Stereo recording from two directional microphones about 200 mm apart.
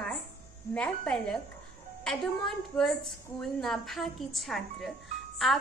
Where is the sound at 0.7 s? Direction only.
5° left (ahead or behind).